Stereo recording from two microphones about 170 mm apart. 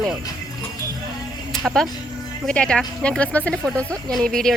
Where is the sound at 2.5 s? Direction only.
5° left (ahead or behind).